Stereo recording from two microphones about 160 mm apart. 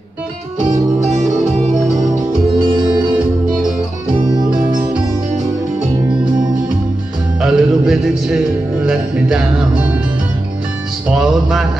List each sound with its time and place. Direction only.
4.3 s music: 25° right (ahead or behind)
7.4 s music: centre (ahead or behind)
11.1 s music: 5° right (ahead or behind)